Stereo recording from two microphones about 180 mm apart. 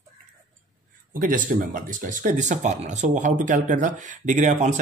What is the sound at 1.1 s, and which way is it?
Speech, 50° right (ahead or behind).